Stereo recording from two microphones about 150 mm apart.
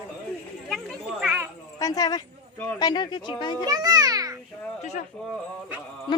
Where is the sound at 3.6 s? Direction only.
25° right (ahead or behind).